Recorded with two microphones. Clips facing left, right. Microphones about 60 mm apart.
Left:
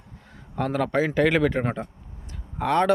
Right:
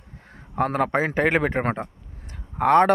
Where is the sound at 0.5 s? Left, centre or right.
Right.